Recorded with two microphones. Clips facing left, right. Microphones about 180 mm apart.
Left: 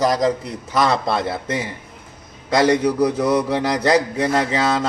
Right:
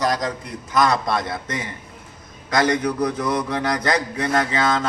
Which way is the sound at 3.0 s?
10° left (ahead or behind).